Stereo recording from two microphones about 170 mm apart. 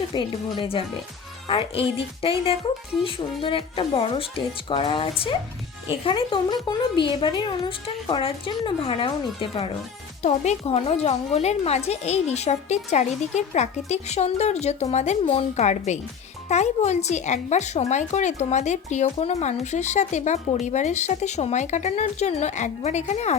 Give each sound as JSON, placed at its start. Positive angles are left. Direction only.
{"t": 0.1, "sound": "speech", "side_deg": 30}